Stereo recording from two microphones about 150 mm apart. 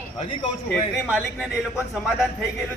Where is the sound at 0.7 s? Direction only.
10° left (ahead or behind).